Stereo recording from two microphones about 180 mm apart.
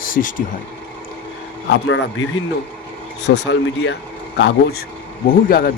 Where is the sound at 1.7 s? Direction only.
90° left.